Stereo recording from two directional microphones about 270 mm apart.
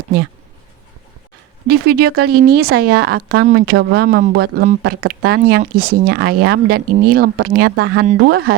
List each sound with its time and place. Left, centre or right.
1.6 s speech: right